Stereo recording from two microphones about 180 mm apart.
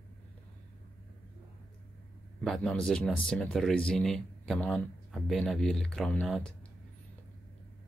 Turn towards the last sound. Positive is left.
turn(degrees=5)  # may be behind; listen again after turning